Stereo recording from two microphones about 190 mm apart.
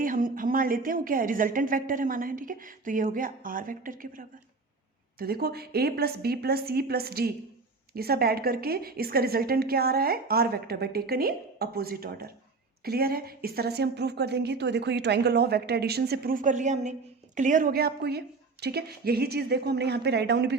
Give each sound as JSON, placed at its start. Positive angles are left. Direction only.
{"t": 0.0, "sound": "a woman's voice", "side_deg": -45}